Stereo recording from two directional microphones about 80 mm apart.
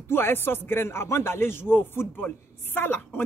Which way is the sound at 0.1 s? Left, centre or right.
Left.